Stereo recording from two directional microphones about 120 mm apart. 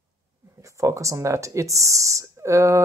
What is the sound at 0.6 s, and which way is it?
Speech, 25° right (ahead or behind).